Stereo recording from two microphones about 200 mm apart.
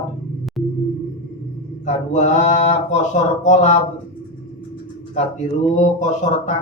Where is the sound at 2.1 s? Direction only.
35° left (ahead or behind).